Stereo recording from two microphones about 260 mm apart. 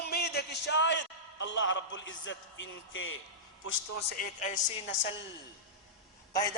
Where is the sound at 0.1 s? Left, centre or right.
Left.